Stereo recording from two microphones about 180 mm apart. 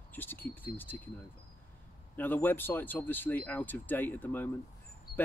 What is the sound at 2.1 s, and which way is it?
Speech, 10° left (ahead or behind).